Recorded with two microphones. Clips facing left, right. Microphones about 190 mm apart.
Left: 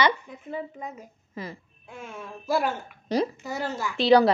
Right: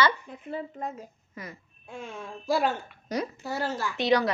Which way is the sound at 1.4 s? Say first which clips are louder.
Left 5 dB; 25° left (ahead or behind).